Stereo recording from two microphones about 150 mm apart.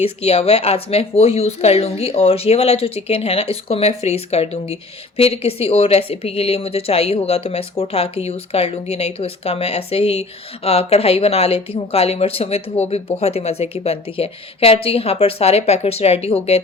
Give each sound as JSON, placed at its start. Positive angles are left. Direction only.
{"t": 0.0, "sound": "speech", "side_deg": 40}